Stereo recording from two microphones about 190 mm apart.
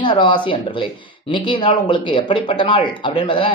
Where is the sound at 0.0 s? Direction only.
25° left (ahead or behind).